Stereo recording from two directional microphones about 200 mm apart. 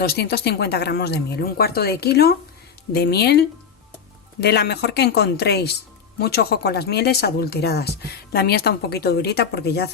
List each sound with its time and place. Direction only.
0.0 s speech: 50° left (ahead or behind)